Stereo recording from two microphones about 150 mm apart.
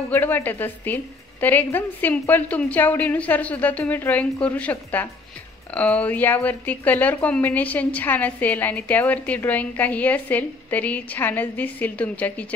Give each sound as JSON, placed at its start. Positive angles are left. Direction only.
{"t": 0.1, "sound": "a woman's voice", "side_deg": 15}